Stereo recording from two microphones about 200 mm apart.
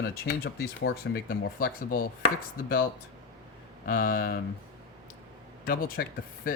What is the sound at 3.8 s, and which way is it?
Speech, 45° left (ahead or behind).